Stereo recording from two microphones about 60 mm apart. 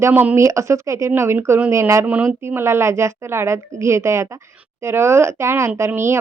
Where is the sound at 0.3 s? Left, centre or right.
Right.